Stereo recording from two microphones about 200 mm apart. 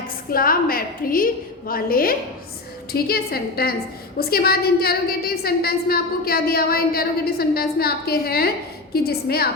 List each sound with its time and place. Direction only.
0.3 s a woman's voice: 45° left (ahead or behind)